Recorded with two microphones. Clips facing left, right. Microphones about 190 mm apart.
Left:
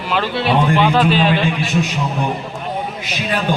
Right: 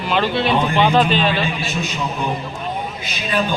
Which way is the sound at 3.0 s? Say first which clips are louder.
Even; 75° left (ahead or behind).